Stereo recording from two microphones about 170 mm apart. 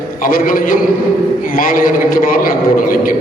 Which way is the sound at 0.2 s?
55° left (ahead or behind).